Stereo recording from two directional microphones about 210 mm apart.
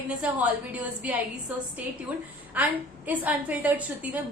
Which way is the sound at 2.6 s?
10° right (ahead or behind).